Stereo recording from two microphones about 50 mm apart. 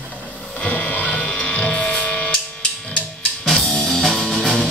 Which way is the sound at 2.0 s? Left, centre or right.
Left.